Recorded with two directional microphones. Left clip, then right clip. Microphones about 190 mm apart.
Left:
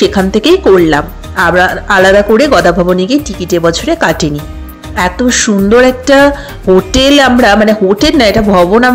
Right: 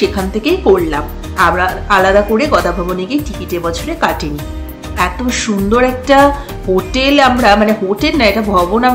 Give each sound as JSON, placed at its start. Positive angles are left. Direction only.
{"t": 0.3, "sound": "speech", "side_deg": 40}